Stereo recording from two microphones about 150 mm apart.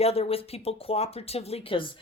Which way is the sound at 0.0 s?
40° left (ahead or behind).